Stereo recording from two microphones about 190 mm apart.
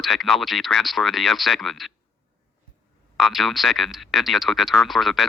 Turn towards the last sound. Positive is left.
turn(degrees=0)  # may be behind; listen again after turning